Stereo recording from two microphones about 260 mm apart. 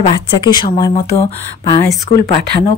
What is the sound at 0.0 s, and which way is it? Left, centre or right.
A woman's voice, centre.